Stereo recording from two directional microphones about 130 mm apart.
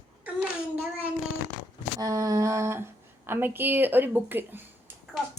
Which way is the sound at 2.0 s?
25° right (ahead or behind).